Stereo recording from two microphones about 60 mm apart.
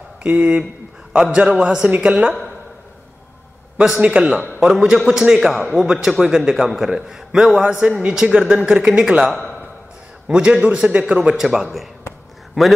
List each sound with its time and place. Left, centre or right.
0.2 s a man's voice: right
4.0 s a man's voice: centre